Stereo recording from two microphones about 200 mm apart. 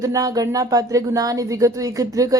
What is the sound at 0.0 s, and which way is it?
A woman's voice, 15° right (ahead or behind).